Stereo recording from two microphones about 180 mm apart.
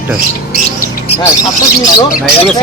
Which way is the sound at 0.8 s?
35° left (ahead or behind).